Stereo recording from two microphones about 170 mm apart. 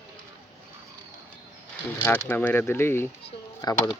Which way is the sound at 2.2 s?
10° left (ahead or behind).